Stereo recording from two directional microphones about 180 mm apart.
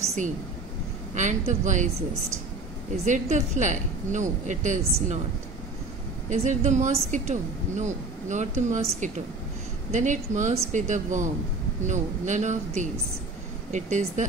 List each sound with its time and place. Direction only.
1.1 s a woman's voice: 40° right (ahead or behind)
3.1 s a woman's voice: 40° right (ahead or behind)
6.3 s a woman's voice: 40° right (ahead or behind)
9.8 s a woman's voice: 40° right (ahead or behind)